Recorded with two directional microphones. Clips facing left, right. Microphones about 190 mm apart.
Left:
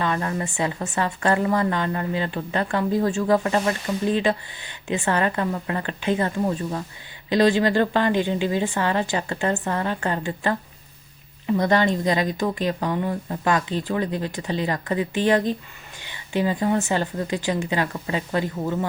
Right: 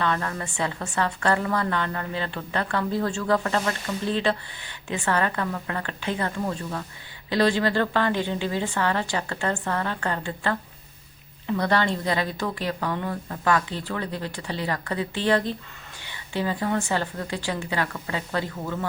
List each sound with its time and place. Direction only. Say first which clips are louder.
0.0 s speech: left 2 dB; 15° left (ahead or behind)